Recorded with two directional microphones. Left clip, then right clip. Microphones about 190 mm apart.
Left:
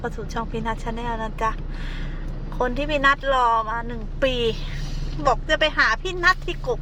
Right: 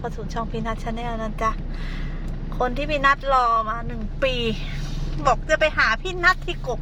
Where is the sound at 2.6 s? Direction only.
5° left (ahead or behind).